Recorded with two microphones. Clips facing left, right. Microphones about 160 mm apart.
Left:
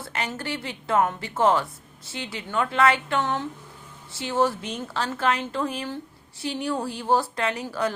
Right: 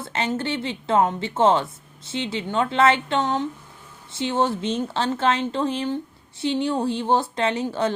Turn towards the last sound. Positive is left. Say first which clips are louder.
# right 4 dB
turn(degrees=-25)  # may be behind; listen again after turning